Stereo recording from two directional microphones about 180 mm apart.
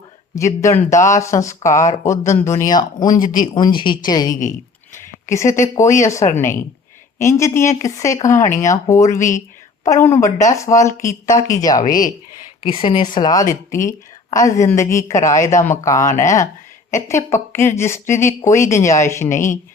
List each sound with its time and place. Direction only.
0.3 s a woman's voice: 15° left (ahead or behind)
11.9 s speech: 50° left (ahead or behind)
12.8 s a woman's voice: 25° left (ahead or behind)